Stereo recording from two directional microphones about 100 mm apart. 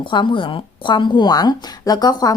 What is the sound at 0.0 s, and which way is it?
A woman's voice, 55° left (ahead or behind).